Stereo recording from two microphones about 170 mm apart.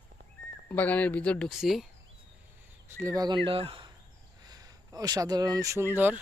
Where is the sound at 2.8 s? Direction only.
15° right (ahead or behind).